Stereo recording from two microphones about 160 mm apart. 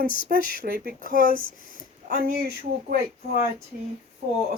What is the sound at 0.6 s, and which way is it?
Speech, 65° right (ahead or behind).